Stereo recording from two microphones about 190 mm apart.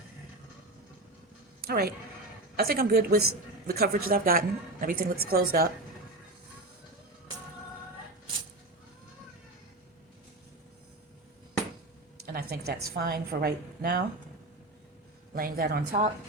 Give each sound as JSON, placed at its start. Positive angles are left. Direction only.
{"t": 1.6, "sound": "a woman's voice", "side_deg": -55}
{"t": 12.2, "sound": "a woman's voice", "side_deg": -55}
{"t": 15.4, "sound": "a woman's voice", "side_deg": -50}